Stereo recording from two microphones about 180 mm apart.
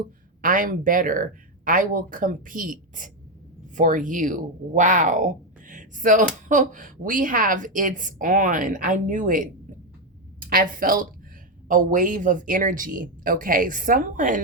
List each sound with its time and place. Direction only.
0.4 s speech: 50° right (ahead or behind)